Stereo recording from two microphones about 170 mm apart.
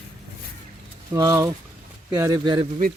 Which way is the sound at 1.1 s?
20° right (ahead or behind).